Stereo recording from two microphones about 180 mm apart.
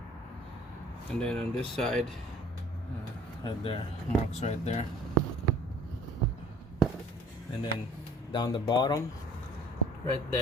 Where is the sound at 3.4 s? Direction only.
30° left (ahead or behind).